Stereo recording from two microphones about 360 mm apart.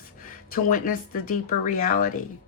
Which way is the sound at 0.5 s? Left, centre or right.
Left.